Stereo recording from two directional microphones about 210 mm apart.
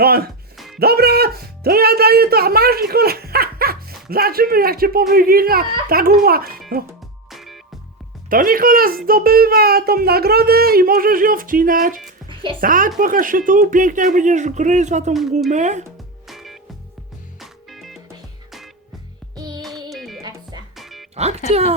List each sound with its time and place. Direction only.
0.0 s speech: 45° right (ahead or behind)
0.5 s music: centre (ahead or behind)
0.8 s speech: 50° right (ahead or behind)
7.3 s music: centre (ahead or behind)
8.3 s speech: 40° right (ahead or behind)
16.2 s music: centre (ahead or behind)
19.4 s music: 20° right (ahead or behind)
19.9 s music: centre (ahead or behind)
20.2 s music: 20° right (ahead or behind)
20.7 s music: centre (ahead or behind)
21.2 s speech: 30° right (ahead or behind)